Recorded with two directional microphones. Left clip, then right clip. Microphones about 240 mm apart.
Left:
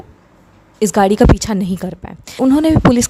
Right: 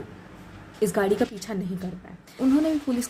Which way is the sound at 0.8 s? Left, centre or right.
Left.